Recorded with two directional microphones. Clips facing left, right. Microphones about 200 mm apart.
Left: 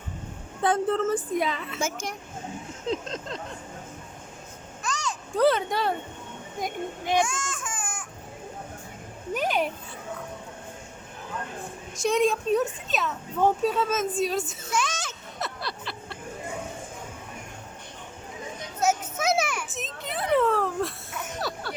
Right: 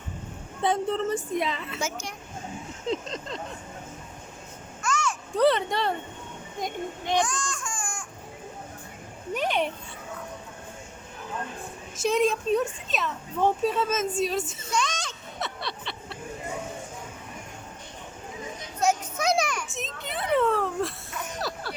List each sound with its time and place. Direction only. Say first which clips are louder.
0.6 s a woman's voice: left 2 dB; centre (ahead or behind)
1.8 s speech: left 4 dB; 50° left (ahead or behind)
2.8 s a woman's voice: even; centre (ahead or behind)
4.8 s a sound: right 4 dB; 15° left (ahead or behind)
5.3 s a woman's voice: even; centre (ahead or behind)
9.3 s a woman's voice: even; centre (ahead or behind)
11.9 s a child's voice: even; centre (ahead or behind)
18.8 s children playing: even; 5° left (ahead or behind)